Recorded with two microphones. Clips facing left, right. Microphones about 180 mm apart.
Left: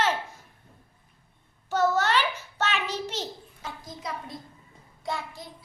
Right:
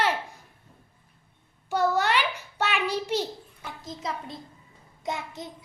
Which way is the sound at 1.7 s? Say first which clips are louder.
Even; 10° right (ahead or behind).